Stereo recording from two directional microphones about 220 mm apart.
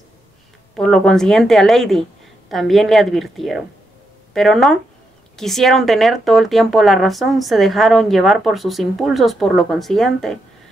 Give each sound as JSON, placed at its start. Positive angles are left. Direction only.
{"t": 0.7, "sound": "speech", "side_deg": 0}